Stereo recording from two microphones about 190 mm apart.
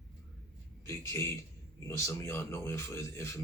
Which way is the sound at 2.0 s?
15° left (ahead or behind).